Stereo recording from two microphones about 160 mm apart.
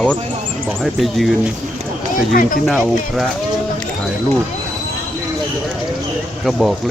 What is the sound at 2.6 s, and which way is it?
Speech, centre (ahead or behind).